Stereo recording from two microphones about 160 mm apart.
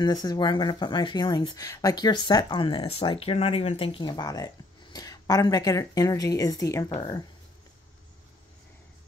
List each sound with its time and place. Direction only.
0.0 s speech: 25° left (ahead or behind)